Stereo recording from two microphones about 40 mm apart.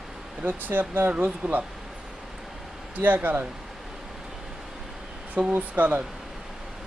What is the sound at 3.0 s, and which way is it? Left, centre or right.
Speech, right.